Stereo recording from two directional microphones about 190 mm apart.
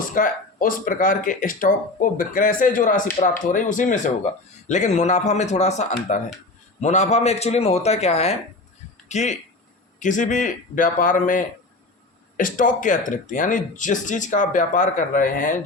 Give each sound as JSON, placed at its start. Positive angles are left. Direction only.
{"t": 0.0, "sound": "speech", "side_deg": 45}